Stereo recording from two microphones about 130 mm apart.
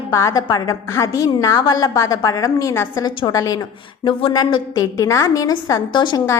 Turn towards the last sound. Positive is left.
turn(degrees=35)  # may be behind; listen again after turning